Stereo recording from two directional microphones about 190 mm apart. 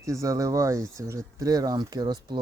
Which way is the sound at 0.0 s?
15° right (ahead or behind).